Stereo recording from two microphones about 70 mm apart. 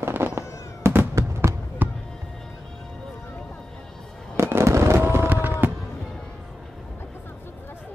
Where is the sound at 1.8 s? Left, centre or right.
Right.